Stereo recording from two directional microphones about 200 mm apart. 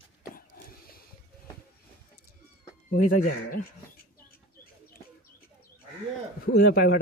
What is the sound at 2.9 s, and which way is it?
Speech, 45° left (ahead or behind).